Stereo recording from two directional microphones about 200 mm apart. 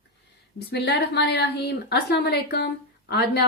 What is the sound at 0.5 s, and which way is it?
A woman's voice, 55° left (ahead or behind).